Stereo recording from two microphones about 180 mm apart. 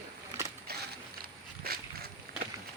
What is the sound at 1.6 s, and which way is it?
Dog, 60° right (ahead or behind).